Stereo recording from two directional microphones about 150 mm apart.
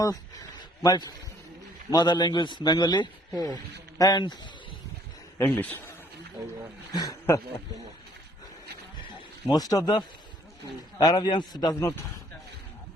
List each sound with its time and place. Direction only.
0.0 s a man's voice: 25° left (ahead or behind)
5.4 s a man's voice: 15° left (ahead or behind)
6.9 s a man's voice: 25° left (ahead or behind)
9.5 s a man's voice: 25° left (ahead or behind)